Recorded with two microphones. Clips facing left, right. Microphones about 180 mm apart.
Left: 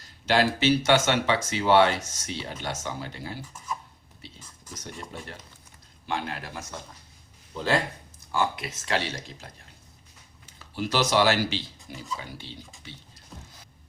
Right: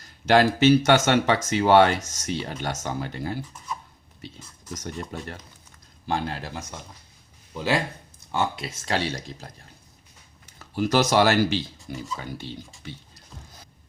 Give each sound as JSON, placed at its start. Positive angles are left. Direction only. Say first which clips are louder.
{"t": 0.3, "sound": "speech", "louder": "right 5 dB", "side_deg": -50}
{"t": 4.7, "sound": "speech", "louder": "right 6 dB", "side_deg": -45}
{"t": 6.1, "sound": "speech", "louder": "right 4 dB", "side_deg": -35}
{"t": 7.5, "sound": "speech", "louder": "right 1 dB", "side_deg": -10}
{"t": 8.3, "sound": "speech", "louder": "right 1 dB", "side_deg": -25}